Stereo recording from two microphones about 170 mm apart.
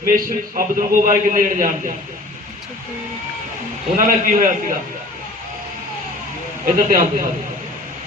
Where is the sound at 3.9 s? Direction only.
50° right (ahead or behind).